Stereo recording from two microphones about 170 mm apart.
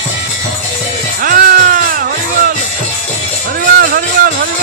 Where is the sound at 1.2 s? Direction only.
55° right (ahead or behind).